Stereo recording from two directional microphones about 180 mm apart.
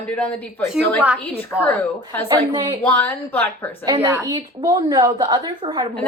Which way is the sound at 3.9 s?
15° right (ahead or behind).